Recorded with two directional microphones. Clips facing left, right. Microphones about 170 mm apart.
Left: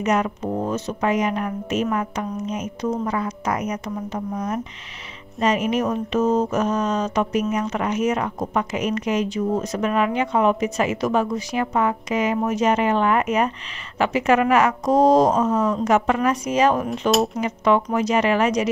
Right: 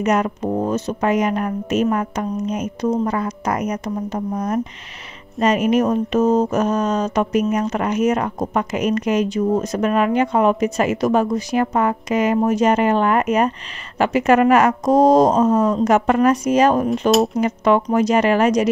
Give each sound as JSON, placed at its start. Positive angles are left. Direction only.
{"t": 0.0, "sound": "a woman's voice", "side_deg": -45}